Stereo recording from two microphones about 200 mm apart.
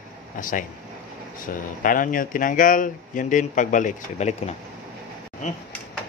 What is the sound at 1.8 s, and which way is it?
Speech, 45° left (ahead or behind).